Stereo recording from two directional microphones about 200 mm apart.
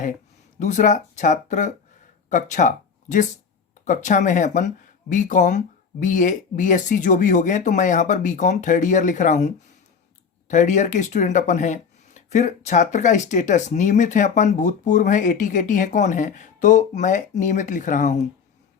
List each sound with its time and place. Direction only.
0.6 s speech: 35° left (ahead or behind)
10.5 s speech: 40° left (ahead or behind)